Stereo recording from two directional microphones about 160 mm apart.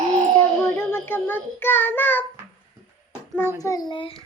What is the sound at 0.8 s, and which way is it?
Child singing, 10° left (ahead or behind).